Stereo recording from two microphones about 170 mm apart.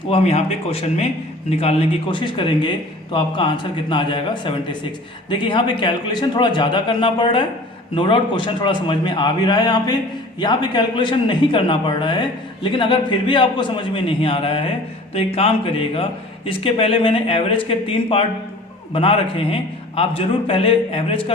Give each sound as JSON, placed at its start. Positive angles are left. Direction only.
{"t": 0.1, "sound": "speech", "side_deg": 40}